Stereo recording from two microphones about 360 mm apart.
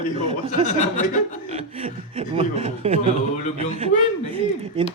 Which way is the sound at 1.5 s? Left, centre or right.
Centre.